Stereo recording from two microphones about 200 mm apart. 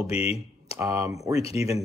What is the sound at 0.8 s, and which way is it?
Speech, 15° right (ahead or behind).